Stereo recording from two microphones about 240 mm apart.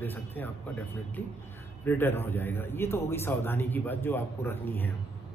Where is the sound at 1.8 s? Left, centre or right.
Centre.